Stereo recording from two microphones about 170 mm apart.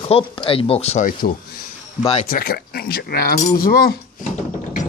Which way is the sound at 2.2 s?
60° left (ahead or behind).